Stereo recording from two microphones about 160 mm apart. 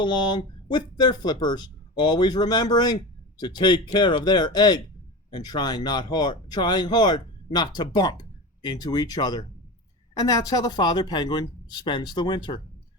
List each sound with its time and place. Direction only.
0.0 s speech: 25° left (ahead or behind)